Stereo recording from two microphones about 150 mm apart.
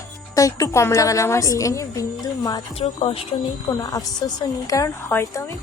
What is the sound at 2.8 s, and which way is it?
Speech, 40° left (ahead or behind).